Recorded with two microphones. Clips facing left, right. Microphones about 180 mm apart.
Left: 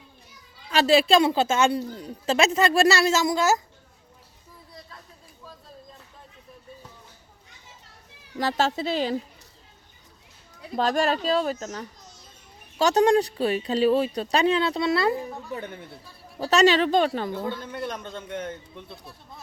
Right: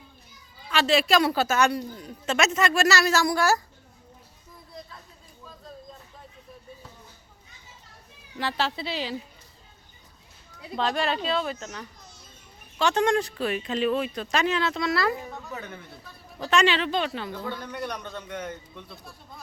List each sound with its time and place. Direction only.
0.7 s a woman's voice: 35° left (ahead or behind); by 3.6 s 20° left (ahead or behind)
8.4 s speech: 40° left (ahead or behind)
10.8 s speech: 45° left (ahead or behind)
17.3 s a woman's voice: 25° left (ahead or behind)